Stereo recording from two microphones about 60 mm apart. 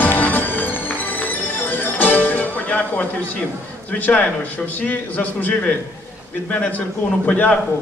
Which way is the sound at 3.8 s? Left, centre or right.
Left.